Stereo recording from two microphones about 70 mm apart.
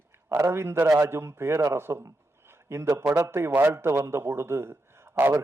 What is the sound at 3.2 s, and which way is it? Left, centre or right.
A man's voice, right.